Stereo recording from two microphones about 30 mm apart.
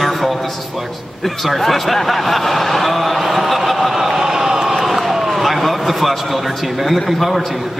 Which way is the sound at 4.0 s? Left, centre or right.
Centre.